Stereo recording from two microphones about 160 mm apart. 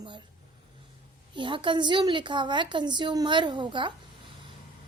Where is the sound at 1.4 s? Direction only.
30° right (ahead or behind).